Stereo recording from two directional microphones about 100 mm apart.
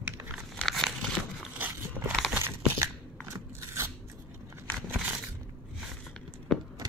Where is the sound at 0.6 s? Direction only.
Centre (ahead or behind).